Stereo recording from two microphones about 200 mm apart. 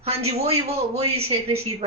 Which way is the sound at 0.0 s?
30° right (ahead or behind).